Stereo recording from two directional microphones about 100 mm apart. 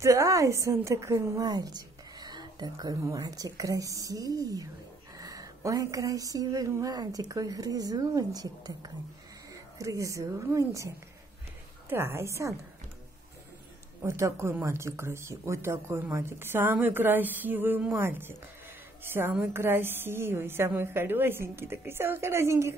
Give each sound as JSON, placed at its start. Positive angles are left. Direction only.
{"t": 0.0, "sound": "a sound", "side_deg": -30}
{"t": 1.4, "sound": "a woman's voice", "side_deg": -40}
{"t": 5.1, "sound": "a sound", "side_deg": -35}
{"t": 9.5, "sound": "speech", "side_deg": -35}
{"t": 11.9, "sound": "a woman's voice", "side_deg": -25}
{"t": 14.0, "sound": "a woman's voice", "side_deg": -30}